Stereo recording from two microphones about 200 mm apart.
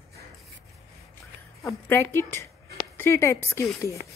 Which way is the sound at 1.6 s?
15° left (ahead or behind).